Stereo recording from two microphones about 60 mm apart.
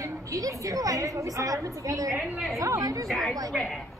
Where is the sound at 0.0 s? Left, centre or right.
Right.